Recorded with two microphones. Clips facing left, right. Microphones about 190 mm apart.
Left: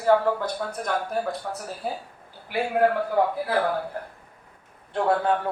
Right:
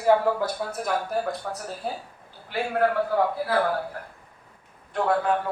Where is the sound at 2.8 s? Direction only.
15° left (ahead or behind).